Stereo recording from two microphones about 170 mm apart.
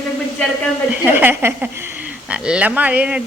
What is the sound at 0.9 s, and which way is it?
A man's voice, 10° right (ahead or behind).